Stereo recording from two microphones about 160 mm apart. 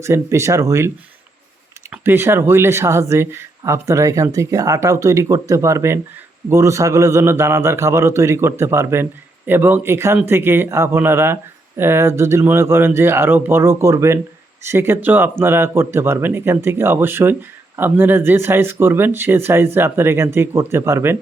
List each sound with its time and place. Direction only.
0.0 s speech: 15° right (ahead or behind)
1.9 s speech: 15° right (ahead or behind)